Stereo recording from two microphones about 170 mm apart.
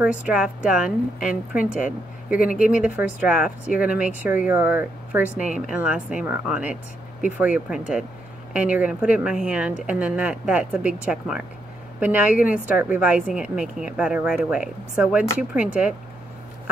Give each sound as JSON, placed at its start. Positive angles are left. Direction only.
{"t": 0.0, "sound": "speech", "side_deg": -5}
{"t": 1.3, "sound": "speech", "side_deg": 55}
{"t": 2.5, "sound": "a woman's voice", "side_deg": -5}